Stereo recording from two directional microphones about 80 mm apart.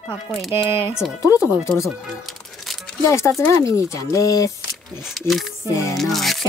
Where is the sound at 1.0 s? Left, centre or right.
Centre.